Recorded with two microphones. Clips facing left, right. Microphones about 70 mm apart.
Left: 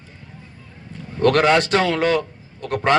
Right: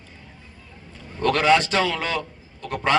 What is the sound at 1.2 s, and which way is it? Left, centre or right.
Speech, left.